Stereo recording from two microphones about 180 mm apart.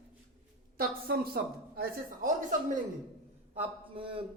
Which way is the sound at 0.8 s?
60° right (ahead or behind).